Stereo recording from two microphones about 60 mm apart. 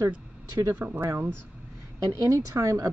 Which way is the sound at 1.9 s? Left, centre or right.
Right.